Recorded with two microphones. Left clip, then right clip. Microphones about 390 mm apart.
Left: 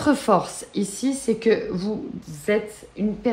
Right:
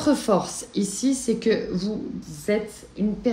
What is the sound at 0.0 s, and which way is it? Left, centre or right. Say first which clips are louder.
Speech: left 2 dB; centre.